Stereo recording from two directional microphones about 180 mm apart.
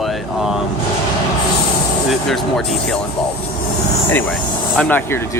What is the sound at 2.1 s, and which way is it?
Speech, centre (ahead or behind).